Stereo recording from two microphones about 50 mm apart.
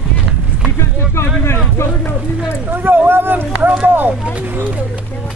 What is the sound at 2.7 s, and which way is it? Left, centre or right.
Speech, right.